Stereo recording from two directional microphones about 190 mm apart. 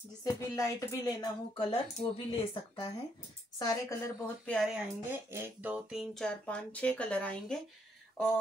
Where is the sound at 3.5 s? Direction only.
15° left (ahead or behind).